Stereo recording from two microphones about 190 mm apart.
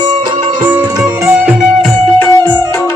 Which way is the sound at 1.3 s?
5° right (ahead or behind).